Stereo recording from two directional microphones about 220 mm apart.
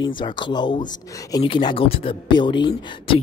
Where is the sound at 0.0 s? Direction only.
20° left (ahead or behind).